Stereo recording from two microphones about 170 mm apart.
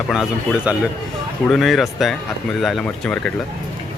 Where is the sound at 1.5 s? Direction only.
Centre (ahead or behind).